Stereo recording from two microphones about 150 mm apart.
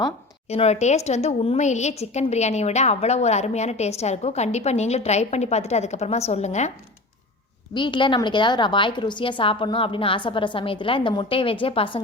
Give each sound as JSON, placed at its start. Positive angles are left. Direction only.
{"t": 0.4, "sound": "a woman's voice", "side_deg": 45}
{"t": 7.7, "sound": "a woman's voice", "side_deg": 30}